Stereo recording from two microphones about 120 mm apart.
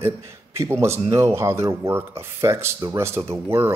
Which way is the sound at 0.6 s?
20° right (ahead or behind).